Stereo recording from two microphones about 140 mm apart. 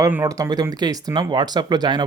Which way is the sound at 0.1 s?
20° right (ahead or behind).